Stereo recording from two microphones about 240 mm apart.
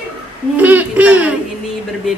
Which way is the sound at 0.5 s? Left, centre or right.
Centre.